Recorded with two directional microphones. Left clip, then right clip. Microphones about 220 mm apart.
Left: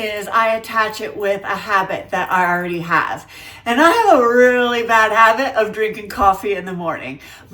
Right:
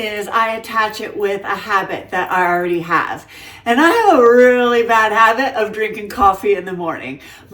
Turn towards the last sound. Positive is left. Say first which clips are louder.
# right 1 dB
turn(degrees=20)  # may be behind; listen again after turning